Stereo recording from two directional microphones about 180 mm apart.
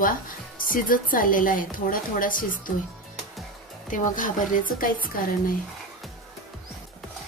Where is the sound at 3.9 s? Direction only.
50° left (ahead or behind).